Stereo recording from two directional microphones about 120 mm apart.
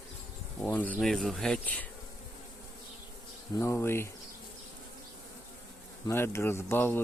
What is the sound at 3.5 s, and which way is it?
Speech, 20° left (ahead or behind).